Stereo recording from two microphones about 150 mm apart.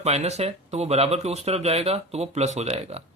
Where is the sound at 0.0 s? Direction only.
45° right (ahead or behind).